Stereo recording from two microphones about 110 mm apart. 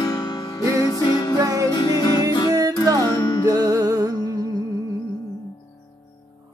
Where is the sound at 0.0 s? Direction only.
40° left (ahead or behind).